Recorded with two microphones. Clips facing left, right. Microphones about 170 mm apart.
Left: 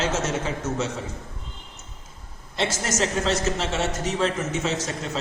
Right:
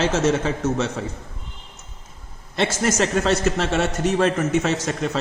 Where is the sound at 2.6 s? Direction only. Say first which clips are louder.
Right 4 dB; 60° right (ahead or behind).